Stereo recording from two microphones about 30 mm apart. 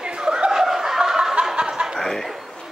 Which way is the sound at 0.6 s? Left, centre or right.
Centre.